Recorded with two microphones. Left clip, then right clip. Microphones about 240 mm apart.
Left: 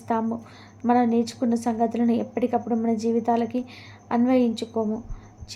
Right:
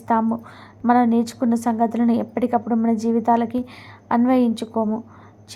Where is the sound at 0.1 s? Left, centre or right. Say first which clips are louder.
Right 6 dB; centre.